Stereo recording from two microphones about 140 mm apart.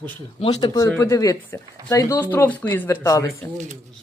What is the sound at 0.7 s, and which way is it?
Speech, 20° left (ahead or behind).